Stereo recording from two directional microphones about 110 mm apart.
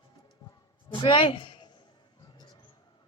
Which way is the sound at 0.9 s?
50° left (ahead or behind).